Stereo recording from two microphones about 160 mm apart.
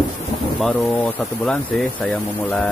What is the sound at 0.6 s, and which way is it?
Speech, 10° left (ahead or behind).